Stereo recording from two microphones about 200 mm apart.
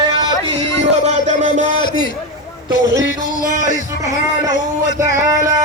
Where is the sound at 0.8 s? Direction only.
35° right (ahead or behind).